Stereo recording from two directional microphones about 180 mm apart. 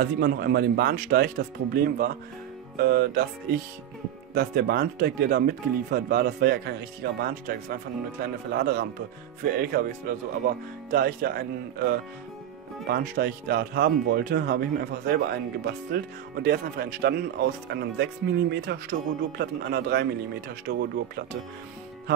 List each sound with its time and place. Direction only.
0.0 s speech: 60° right (ahead or behind)
4.3 s speech: 60° right (ahead or behind)